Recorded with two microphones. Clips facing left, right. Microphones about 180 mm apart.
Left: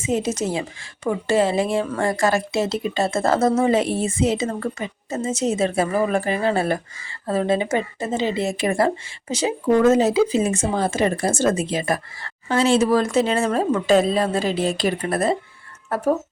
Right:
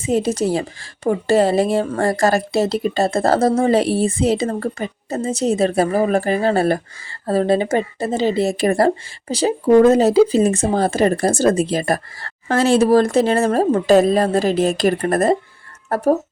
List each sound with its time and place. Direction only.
0.0 s speech: 35° right (ahead or behind)